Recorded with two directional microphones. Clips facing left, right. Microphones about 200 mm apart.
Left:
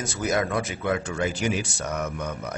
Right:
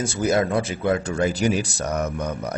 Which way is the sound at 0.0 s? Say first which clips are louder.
Right 5 dB; 30° right (ahead or behind).